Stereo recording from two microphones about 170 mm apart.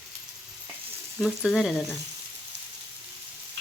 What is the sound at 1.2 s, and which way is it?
Speech, centre (ahead or behind).